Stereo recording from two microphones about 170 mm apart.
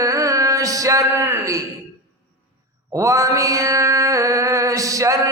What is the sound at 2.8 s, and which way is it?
Mantra, 20° right (ahead or behind).